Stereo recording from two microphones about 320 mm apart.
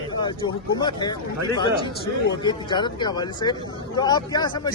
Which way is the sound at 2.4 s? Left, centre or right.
Centre.